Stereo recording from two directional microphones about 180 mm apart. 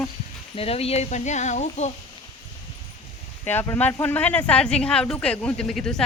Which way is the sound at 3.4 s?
10° left (ahead or behind).